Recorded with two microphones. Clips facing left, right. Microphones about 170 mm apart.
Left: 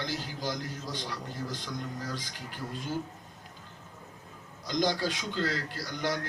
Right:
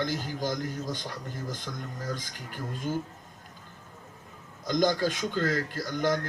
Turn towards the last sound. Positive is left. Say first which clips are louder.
# right 5 dB
turn(degrees=-45)  # may be behind; listen again after turning